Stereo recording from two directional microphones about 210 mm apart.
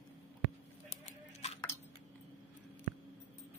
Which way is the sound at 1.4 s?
30° left (ahead or behind).